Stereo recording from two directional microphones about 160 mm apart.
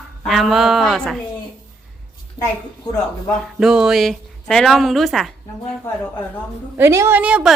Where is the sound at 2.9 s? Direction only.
25° left (ahead or behind).